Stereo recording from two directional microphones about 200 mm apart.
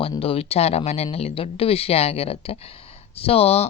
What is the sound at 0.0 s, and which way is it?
Speech, 30° left (ahead or behind).